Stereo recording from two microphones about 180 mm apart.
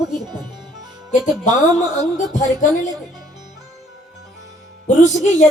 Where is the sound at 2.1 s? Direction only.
40° left (ahead or behind).